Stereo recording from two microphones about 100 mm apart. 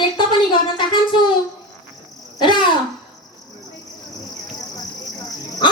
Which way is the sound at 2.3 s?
50° left (ahead or behind).